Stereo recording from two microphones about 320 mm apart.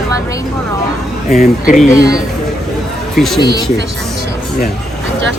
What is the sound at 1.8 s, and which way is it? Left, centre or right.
A man's voice, centre.